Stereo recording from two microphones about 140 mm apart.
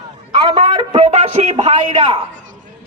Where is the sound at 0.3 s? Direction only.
35° right (ahead or behind).